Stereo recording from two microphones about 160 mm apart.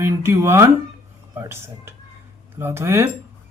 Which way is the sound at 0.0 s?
15° right (ahead or behind).